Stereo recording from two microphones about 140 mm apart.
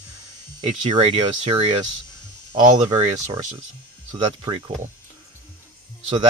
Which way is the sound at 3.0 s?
50° right (ahead or behind).